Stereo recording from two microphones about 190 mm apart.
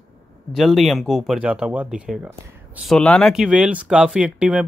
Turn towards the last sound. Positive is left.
turn(degrees=-5)  # may be behind; listen again after turning